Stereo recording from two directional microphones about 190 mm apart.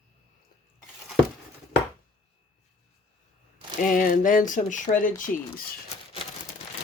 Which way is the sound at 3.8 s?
45° left (ahead or behind).